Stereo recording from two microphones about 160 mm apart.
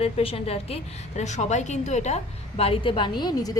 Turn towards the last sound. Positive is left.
turn(degrees=25)  # may be behind; listen again after turning